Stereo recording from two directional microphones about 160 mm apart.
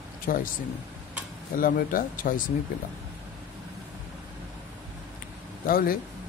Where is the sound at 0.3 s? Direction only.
60° left (ahead or behind).